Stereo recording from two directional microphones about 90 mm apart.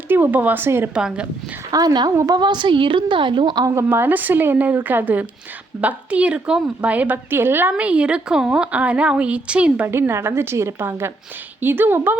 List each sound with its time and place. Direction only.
0.1 s speech: 20° right (ahead or behind)
0.9 s a woman's voice: 10° right (ahead or behind)
1.7 s a woman's voice: 50° right (ahead or behind)
3.7 s a woman's voice: 30° right (ahead or behind)
7.7 s a woman's voice: 10° right (ahead or behind)
9.8 s a woman's voice: 25° right (ahead or behind)